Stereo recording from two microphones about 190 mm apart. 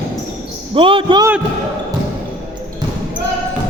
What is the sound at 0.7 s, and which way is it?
Speech, 25° right (ahead or behind).